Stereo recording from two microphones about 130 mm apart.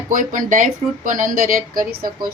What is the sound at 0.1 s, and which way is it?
A woman's voice, 90° right.